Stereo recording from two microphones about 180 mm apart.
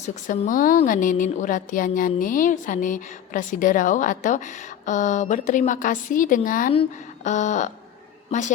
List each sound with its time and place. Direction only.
0.0 s a woman's voice: 50° left (ahead or behind)